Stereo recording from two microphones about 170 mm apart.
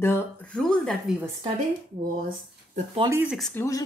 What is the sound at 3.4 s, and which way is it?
Speech, 10° left (ahead or behind).